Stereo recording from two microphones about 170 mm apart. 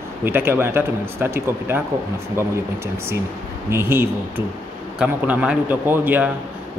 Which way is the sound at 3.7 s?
15° right (ahead or behind).